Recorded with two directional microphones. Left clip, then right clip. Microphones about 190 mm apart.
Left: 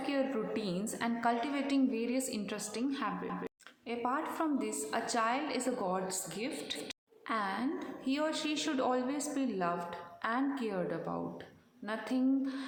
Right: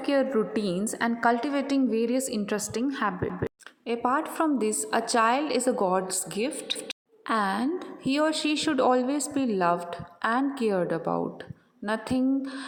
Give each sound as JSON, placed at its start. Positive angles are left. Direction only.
{"t": 0.0, "sound": "a woman's voice", "side_deg": -40}